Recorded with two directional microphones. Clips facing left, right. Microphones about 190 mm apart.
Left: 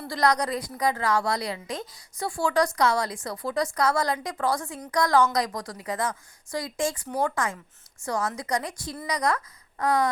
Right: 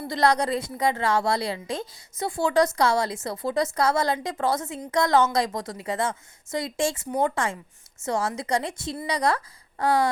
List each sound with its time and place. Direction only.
0.1 s a woman's voice: 25° right (ahead or behind)